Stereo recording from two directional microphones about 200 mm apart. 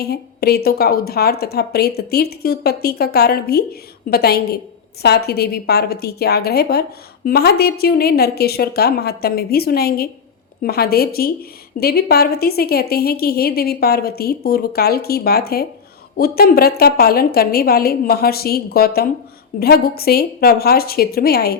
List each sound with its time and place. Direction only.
0.0 s a woman's voice: 50° left (ahead or behind)